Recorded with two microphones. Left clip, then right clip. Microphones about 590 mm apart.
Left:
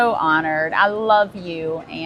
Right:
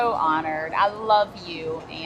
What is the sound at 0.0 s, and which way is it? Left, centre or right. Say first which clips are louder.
A woman's voice: left 5 dB; left.